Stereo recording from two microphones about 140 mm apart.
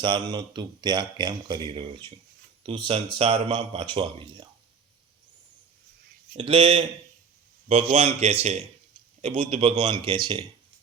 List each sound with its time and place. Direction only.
0.0 s a man's voice: 35° right (ahead or behind)
6.3 s a man's voice: 40° right (ahead or behind)
10.0 s speech: 35° right (ahead or behind)